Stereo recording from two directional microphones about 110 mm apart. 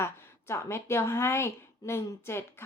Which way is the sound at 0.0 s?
25° left (ahead or behind).